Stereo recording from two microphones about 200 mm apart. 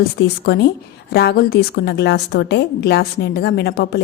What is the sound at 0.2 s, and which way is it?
A woman's voice, 55° left (ahead or behind).